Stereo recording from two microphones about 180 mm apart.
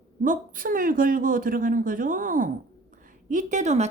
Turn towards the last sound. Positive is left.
turn(degrees=-40)  # may be behind; listen again after turning